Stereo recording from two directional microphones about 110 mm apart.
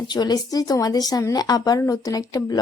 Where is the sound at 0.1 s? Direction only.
40° left (ahead or behind).